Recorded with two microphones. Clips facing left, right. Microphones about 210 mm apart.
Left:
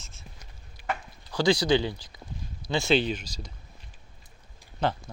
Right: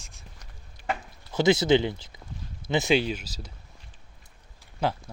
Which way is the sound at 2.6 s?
20° right (ahead or behind).